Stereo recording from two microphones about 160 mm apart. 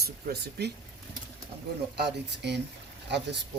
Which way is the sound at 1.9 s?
90° right.